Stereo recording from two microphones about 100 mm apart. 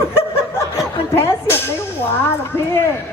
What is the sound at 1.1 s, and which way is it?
Speech, 25° left (ahead or behind).